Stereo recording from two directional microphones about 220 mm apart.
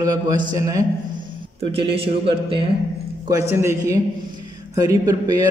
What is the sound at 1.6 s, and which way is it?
Speech, 25° right (ahead or behind).